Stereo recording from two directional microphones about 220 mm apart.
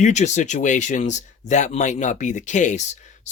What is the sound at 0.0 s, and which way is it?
Speech, 30° left (ahead or behind).